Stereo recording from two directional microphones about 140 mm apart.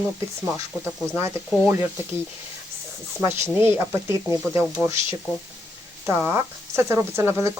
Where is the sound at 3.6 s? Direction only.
15° right (ahead or behind).